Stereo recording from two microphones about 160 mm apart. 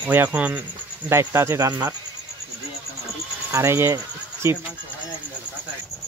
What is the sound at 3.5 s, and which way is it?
Speech, 15° right (ahead or behind).